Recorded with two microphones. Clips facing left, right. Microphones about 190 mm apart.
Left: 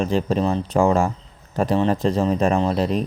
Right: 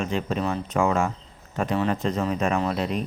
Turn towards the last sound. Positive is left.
turn(degrees=35)  # may be behind; listen again after turning